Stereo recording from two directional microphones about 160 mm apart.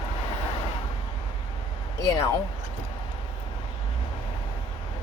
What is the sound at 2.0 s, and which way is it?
Speech, 20° left (ahead or behind).